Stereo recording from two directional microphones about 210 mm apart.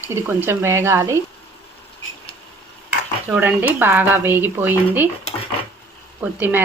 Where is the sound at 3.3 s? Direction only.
10° right (ahead or behind).